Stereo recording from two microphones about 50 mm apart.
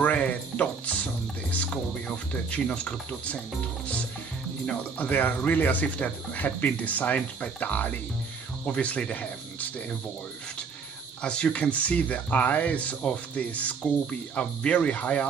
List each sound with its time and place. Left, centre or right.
0.0 s a sound: left
2.5 s speech: left
4.9 s speech: left
11.2 s speech: centre